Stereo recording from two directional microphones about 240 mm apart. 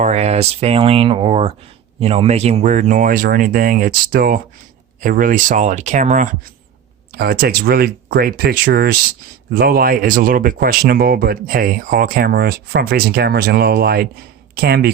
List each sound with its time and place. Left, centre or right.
0.0 s speech: right